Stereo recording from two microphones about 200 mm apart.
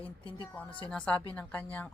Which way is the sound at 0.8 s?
5° left (ahead or behind).